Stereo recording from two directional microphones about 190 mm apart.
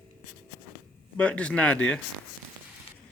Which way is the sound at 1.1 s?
5° left (ahead or behind).